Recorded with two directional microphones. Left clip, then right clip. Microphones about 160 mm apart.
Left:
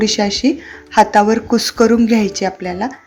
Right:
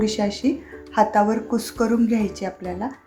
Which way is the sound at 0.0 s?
15° left (ahead or behind).